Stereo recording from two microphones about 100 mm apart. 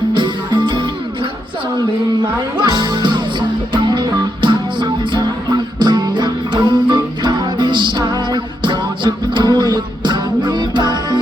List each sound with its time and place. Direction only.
0.1 s music: 50° right (ahead or behind)
2.6 s music: 45° right (ahead or behind)